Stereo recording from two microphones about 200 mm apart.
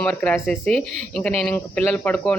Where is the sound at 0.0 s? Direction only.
5° left (ahead or behind).